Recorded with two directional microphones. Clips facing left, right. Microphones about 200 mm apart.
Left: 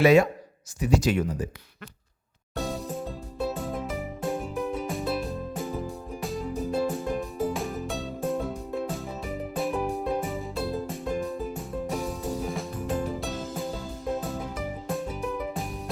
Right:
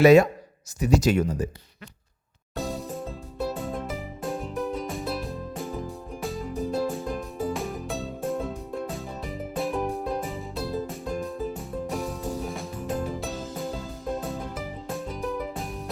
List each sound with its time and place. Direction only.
0.0 s speech: 40° right (ahead or behind)
2.6 s music: centre (ahead or behind)